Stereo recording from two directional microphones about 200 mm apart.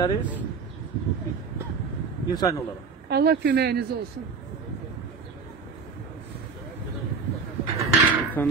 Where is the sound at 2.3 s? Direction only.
20° left (ahead or behind).